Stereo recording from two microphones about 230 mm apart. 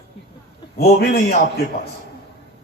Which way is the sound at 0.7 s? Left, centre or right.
Left.